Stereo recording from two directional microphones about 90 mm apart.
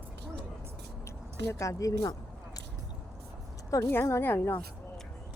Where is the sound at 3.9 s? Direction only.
25° left (ahead or behind).